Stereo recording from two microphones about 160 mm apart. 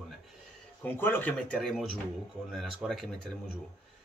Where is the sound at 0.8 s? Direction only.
10° left (ahead or behind).